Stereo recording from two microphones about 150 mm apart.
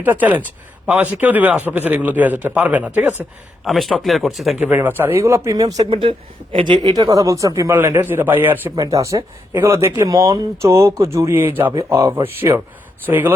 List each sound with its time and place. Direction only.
0.0 s a man's voice: 10° right (ahead or behind)
3.6 s speech: centre (ahead or behind)
4.6 s a woman's voice: 10° right (ahead or behind)
5.8 s a woman's voice: 40° right (ahead or behind); by 8.7 s 15° right (ahead or behind)
8.7 s a woman's voice: 25° right (ahead or behind)